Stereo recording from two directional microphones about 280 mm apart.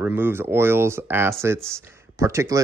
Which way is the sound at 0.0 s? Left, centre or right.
Centre.